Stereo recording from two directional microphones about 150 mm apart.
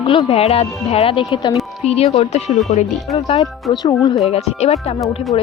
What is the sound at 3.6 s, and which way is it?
Speech, 25° left (ahead or behind).